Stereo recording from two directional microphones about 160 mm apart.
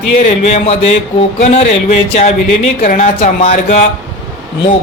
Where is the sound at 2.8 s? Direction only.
55° left (ahead or behind).